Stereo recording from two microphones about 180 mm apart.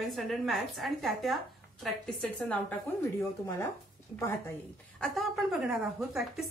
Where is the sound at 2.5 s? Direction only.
10° left (ahead or behind).